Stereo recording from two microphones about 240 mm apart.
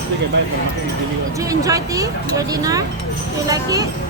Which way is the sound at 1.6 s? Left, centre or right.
Centre.